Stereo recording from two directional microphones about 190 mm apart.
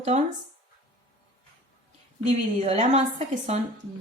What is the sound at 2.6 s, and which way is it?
Speech, 35° right (ahead or behind).